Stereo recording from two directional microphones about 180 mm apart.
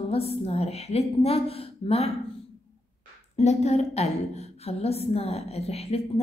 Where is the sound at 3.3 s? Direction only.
40° left (ahead or behind).